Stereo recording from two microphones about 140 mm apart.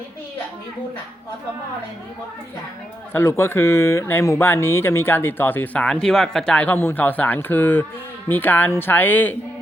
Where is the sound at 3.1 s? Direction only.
20° left (ahead or behind).